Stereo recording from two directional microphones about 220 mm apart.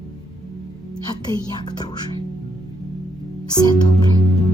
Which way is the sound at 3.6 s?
20° left (ahead or behind).